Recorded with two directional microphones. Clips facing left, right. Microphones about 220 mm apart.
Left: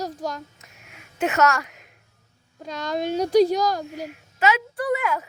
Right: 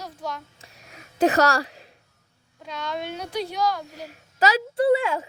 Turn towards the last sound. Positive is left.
turn(degrees=-30)  # may be behind; listen again after turning